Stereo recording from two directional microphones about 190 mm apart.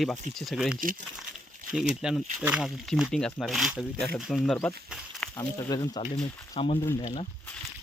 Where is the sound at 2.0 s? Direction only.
5° right (ahead or behind).